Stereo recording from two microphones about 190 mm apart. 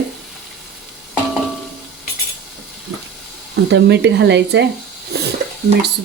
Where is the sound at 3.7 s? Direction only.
65° right (ahead or behind).